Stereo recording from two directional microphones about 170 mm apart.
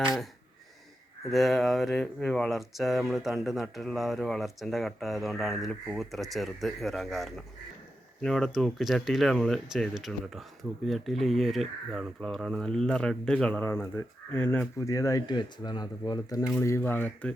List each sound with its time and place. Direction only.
0.0 s speech: centre (ahead or behind)
1.3 s speech: centre (ahead or behind)